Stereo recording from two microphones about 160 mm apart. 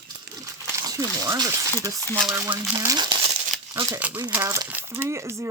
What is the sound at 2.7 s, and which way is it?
Speech, 25° right (ahead or behind).